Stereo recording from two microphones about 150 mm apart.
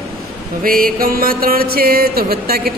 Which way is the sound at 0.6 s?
70° right (ahead or behind).